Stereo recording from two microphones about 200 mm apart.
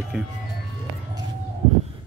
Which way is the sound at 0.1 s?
5° right (ahead or behind).